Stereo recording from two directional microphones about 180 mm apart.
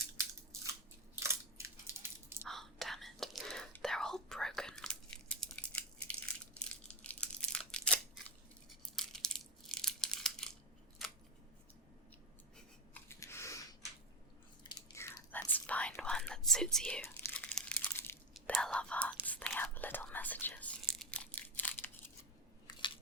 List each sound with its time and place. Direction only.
0.6 s crushing: 15° right (ahead or behind)
2.5 s whispering: centre (ahead or behind)
9.0 s crushing: 5° left (ahead or behind)
12.9 s chewing: 15° left (ahead or behind)
14.7 s whispering: 20° left (ahead or behind)
21.1 s a sound: 10° left (ahead or behind)